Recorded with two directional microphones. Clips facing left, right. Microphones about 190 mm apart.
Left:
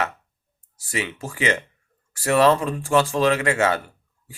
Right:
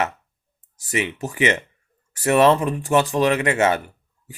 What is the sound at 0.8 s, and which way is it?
Speech, 20° right (ahead or behind).